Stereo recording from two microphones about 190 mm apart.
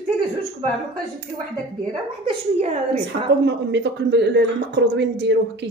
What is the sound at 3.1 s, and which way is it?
Speech, 65° right (ahead or behind).